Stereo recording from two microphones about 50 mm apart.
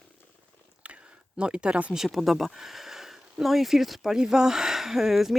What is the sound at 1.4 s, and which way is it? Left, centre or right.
Speech, right.